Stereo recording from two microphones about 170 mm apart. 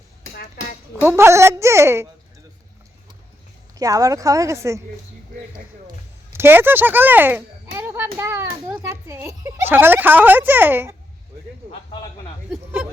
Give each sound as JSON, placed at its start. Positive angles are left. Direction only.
{"t": 1.0, "sound": "speech", "side_deg": -15}
{"t": 3.8, "sound": "speech", "side_deg": -20}
{"t": 6.3, "sound": "a child's voice", "side_deg": -15}